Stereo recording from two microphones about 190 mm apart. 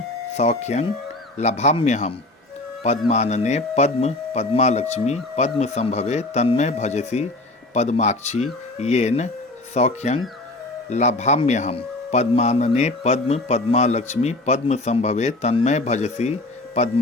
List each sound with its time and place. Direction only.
0.3 s a man's voice: 35° left (ahead or behind)